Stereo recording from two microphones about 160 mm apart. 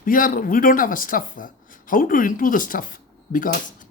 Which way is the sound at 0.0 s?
60° left (ahead or behind).